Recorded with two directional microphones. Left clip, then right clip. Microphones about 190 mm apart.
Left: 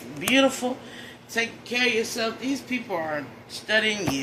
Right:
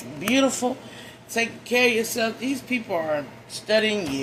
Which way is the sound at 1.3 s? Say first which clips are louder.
Right 3 dB; 50° right (ahead or behind).